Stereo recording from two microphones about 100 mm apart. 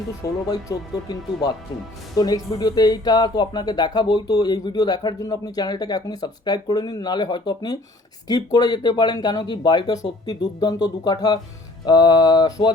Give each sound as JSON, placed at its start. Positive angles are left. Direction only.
{"t": 0.2, "sound": "speech", "side_deg": 35}